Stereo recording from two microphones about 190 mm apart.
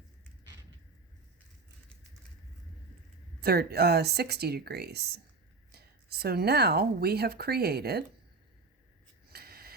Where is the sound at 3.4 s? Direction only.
55° right (ahead or behind).